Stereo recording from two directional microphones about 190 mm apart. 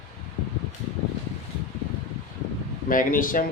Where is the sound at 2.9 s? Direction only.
45° left (ahead or behind).